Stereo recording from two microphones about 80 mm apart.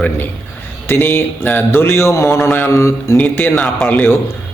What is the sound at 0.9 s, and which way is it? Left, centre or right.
A man's voice, left.